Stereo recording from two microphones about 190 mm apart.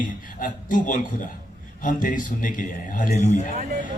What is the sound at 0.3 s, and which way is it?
A man's voice, 45° left (ahead or behind).